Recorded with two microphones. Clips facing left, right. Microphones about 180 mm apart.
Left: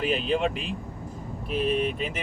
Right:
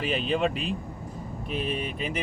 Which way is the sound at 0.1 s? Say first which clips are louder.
Left 1 dB; centre (ahead or behind).